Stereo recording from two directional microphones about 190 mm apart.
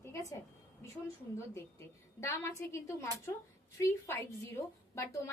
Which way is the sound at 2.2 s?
15° left (ahead or behind).